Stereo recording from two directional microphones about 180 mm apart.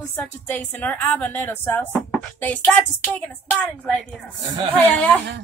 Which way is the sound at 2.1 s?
5° left (ahead or behind).